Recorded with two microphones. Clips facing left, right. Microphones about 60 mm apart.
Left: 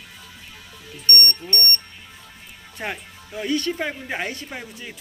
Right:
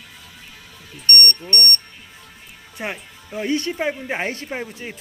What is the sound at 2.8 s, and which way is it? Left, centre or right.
Speech, centre.